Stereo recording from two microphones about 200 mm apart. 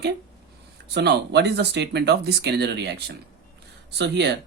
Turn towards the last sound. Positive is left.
turn(degrees=-60)  # may be behind; listen again after turning